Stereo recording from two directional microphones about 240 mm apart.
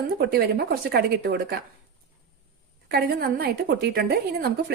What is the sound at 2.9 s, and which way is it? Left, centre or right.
A woman's voice, right.